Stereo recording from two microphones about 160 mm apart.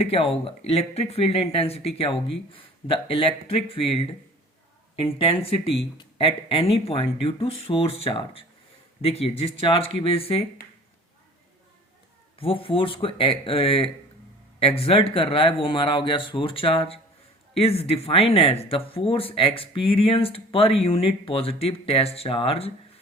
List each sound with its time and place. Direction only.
0.0 s speech: 35° left (ahead or behind)
12.4 s speech: 35° left (ahead or behind)